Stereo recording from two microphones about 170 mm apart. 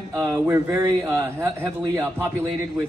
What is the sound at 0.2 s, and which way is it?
A man's voice, 20° right (ahead or behind).